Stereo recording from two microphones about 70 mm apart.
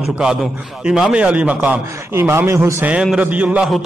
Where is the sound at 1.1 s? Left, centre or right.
Centre.